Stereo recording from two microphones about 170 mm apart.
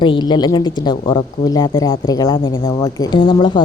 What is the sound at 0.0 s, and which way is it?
A woman's voice, 25° left (ahead or behind).